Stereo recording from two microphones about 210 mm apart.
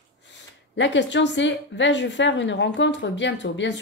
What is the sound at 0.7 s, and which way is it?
A woman's voice, 60° left (ahead or behind).